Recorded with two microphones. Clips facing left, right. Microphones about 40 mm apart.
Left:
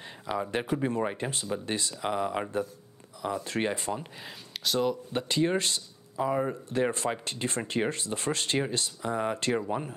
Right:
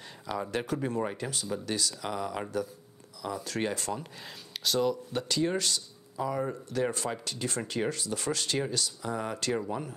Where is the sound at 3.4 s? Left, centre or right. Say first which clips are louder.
Even; left; by 4.9 s centre.